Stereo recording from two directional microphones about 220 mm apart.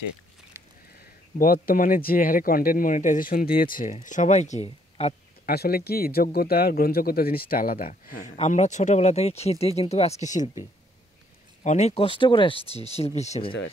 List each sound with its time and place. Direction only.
0.5 s a sound: 10° right (ahead or behind)
1.4 s speech: 40° left (ahead or behind)
5.5 s speech: 45° left (ahead or behind)
11.6 s speech: 30° left (ahead or behind)